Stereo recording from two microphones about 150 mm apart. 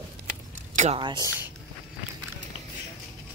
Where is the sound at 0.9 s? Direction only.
35° right (ahead or behind).